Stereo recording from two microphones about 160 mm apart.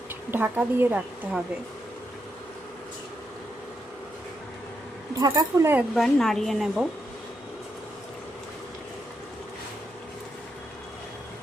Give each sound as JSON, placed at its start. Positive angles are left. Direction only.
{"t": 0.3, "sound": "speech", "side_deg": -10}
{"t": 5.2, "sound": "speech", "side_deg": -20}
{"t": 5.9, "sound": "speech", "side_deg": 0}